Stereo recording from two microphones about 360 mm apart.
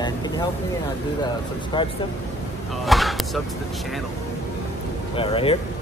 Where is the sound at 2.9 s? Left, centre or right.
Centre.